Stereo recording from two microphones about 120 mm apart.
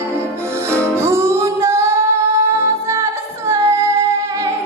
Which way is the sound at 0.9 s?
20° right (ahead or behind).